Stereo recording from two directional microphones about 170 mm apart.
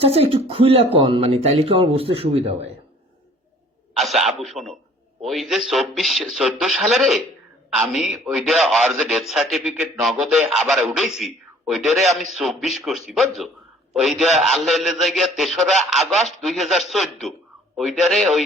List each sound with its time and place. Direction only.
0.0 s speech: 35° right (ahead or behind)
3.9 s a man's voice: centre (ahead or behind)